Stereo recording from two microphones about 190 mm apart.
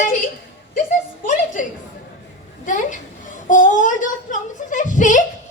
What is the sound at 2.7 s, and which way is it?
A child's voice, 40° left (ahead or behind).